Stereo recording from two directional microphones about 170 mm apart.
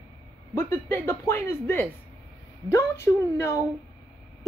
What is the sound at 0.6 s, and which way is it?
A woman's voice, 15° left (ahead or behind).